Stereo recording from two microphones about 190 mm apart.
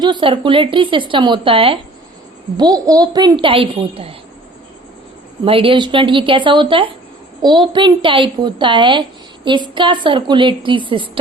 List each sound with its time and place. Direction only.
0.0 s speech: 25° right (ahead or behind)
5.5 s speech: 30° right (ahead or behind)